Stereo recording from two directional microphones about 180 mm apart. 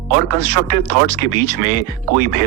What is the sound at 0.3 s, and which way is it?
Speech, 45° right (ahead or behind).